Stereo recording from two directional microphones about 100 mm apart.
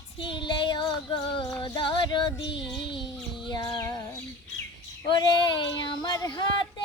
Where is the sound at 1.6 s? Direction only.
50° left (ahead or behind).